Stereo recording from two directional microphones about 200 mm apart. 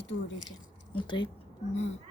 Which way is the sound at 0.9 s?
25° left (ahead or behind).